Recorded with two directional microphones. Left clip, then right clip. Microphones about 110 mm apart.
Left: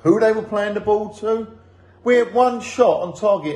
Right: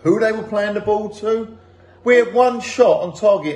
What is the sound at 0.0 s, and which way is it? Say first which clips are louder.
A man's voice: left 1 dB; 50° left (ahead or behind).